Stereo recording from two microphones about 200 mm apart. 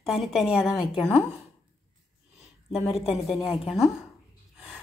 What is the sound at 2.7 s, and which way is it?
A woman's voice, centre (ahead or behind).